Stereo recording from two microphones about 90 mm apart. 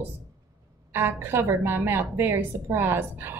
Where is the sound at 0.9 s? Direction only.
25° right (ahead or behind).